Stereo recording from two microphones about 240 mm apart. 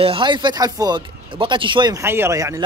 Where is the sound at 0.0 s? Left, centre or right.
Right.